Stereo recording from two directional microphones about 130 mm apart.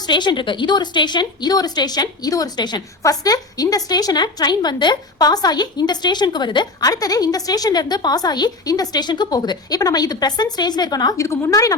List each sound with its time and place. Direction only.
0.0 s a woman's voice: 35° left (ahead or behind)